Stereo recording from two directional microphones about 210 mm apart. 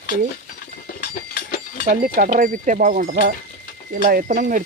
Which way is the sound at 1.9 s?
40° right (ahead or behind).